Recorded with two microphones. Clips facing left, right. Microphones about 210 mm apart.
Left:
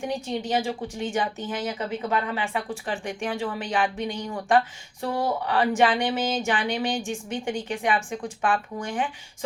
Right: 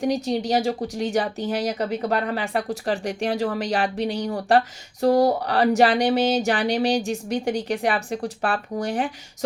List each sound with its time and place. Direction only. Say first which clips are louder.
0.0 s speech: right 6 dB; 40° right (ahead or behind)